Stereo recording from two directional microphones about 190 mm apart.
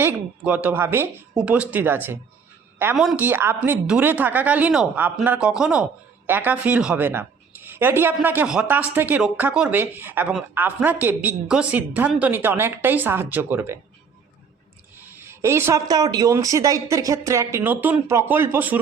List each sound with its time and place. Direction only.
0.0 s a woman's voice: 5° right (ahead or behind)
15.3 s a woman's voice: 15° right (ahead or behind)